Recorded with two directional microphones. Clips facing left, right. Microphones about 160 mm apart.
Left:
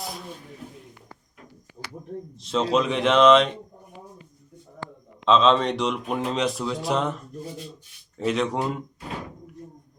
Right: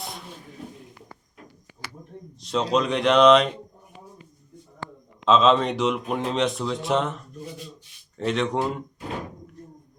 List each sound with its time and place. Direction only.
2.4 s speech: centre (ahead or behind)
5.2 s speech: 5° right (ahead or behind)
8.2 s speech: centre (ahead or behind)